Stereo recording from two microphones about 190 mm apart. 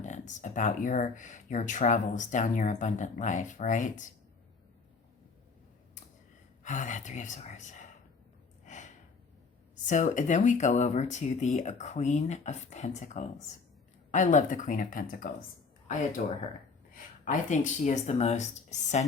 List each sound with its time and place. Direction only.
0.0 s speech: 40° left (ahead or behind)
6.6 s speech: 40° left (ahead or behind)
8.6 s gasp: 40° left (ahead or behind)
9.7 s speech: 40° left (ahead or behind)